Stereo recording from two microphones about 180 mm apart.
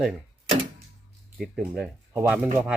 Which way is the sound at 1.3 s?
Centre (ahead or behind).